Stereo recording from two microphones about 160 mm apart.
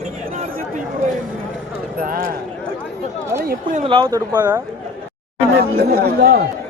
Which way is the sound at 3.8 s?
35° right (ahead or behind).